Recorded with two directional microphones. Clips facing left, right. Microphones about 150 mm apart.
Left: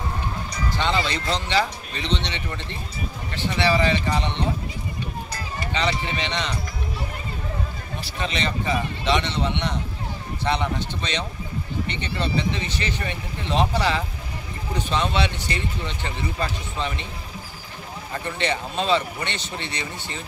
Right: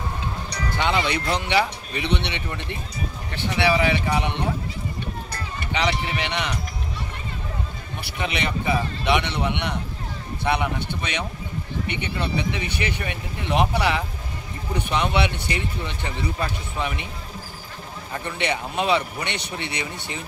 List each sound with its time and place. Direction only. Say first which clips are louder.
0.5 s music: even; 70° right (ahead or behind)
0.7 s speech: right 2 dB; 15° right (ahead or behind)
5.7 s speech: right 1 dB; 15° right (ahead or behind)
8.2 s speech: even; 15° right (ahead or behind)
18.1 s speech: even; 15° right (ahead or behind)